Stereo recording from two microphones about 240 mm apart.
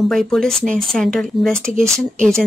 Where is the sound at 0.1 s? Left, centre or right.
Centre.